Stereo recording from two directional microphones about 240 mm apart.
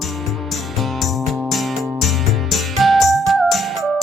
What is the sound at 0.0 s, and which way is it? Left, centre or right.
Music, centre.